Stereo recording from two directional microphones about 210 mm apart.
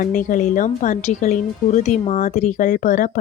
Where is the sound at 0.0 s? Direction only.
35° left (ahead or behind).